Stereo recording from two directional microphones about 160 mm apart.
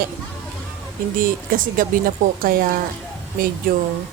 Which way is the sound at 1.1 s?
60° right (ahead or behind).